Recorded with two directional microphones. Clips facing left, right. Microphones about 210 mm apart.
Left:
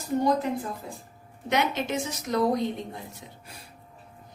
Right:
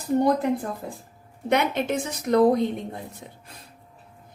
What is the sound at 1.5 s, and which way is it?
A woman's voice, 55° right (ahead or behind).